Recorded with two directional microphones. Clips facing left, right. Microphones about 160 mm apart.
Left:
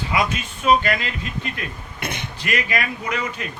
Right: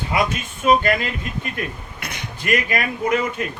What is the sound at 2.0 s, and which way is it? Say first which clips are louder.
Speech: left 6 dB; 25° left (ahead or behind).